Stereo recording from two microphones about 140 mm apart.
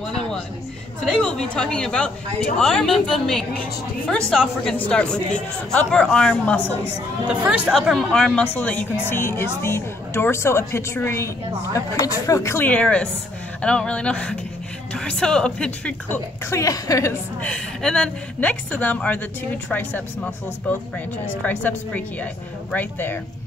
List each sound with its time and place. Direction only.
1.0 s a woman's voice: 5° left (ahead or behind)
7.2 s a woman's voice: 10° right (ahead or behind); by 11.2 s 20° left (ahead or behind)
12.3 s a woman's voice: 20° left (ahead or behind)
16.4 s a woman's voice: 20° left (ahead or behind)
17.4 s a woman's voice: 5° left (ahead or behind)